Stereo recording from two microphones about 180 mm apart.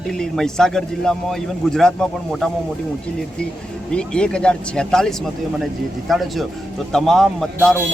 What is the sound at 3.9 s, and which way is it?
A man's voice, 5° left (ahead or behind).